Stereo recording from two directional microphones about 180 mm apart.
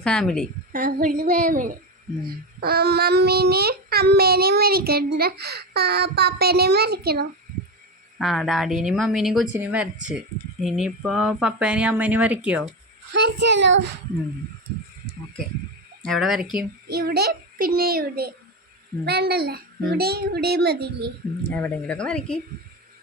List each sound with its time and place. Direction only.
0.0 s speech: 5° left (ahead or behind)
0.7 s speech: 50° right (ahead or behind)
2.6 s a child's voice: 60° right (ahead or behind)
8.2 s speech: centre (ahead or behind)
13.1 s a child's voice: 75° right (ahead or behind)
16.0 s speech: centre (ahead or behind)
16.9 s a child's voice: 60° right (ahead or behind)
21.5 s speech: 5° left (ahead or behind)